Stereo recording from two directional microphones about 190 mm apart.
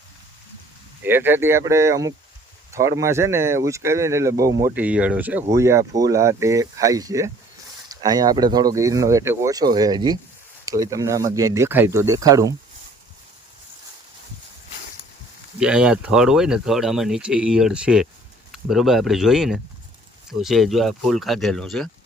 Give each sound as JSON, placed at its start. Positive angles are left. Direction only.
{"t": 1.0, "sound": "speech", "side_deg": -10}
{"t": 15.5, "sound": "speech", "side_deg": -5}